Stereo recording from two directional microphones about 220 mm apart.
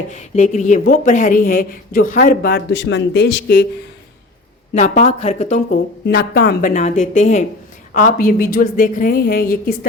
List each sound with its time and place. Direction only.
0.1 s speech: 30° left (ahead or behind); by 3.7 s 50° left (ahead or behind)
4.7 s speech: 35° left (ahead or behind)